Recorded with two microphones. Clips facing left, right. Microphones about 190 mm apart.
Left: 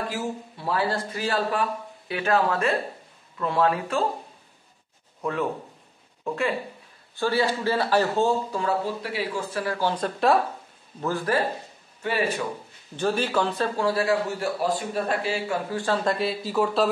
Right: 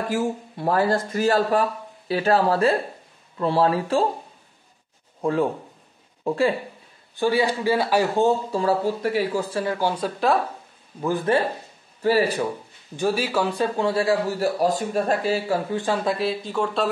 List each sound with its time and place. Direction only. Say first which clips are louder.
0.1 s a man's voice: right 6 dB; 45° right (ahead or behind); by 4.0 s 30° right (ahead or behind)
5.2 s a man's voice: right 5 dB; 30° right (ahead or behind)
7.2 s a man's voice: right 3 dB; 15° right (ahead or behind)
8.5 s a man's voice: right 4 dB; 30° right (ahead or behind)
9.8 s a man's voice: right 1 dB; 10° right (ahead or behind)
11.0 s a man's voice: right 4 dB; 15° right (ahead or behind)
12.0 s a man's voice: right 6 dB; 35° right (ahead or behind)
12.9 s a man's voice: right 1 dB; 10° right (ahead or behind)
13.7 s a man's voice: right 1 dB; 25° right (ahead or behind)
14.6 s a man's voice: right 4 dB; 40° right (ahead or behind)
15.7 s a man's voice: right 2 dB; 20° right (ahead or behind)
16.0 s speech: right 1 dB; centre (ahead or behind)